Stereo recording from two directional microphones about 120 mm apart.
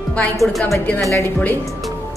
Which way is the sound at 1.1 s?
15° left (ahead or behind).